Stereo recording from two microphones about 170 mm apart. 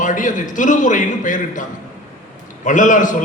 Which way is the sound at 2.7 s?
50° left (ahead or behind).